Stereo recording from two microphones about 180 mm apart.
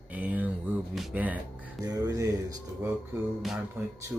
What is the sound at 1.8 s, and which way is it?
Speech, 20° right (ahead or behind).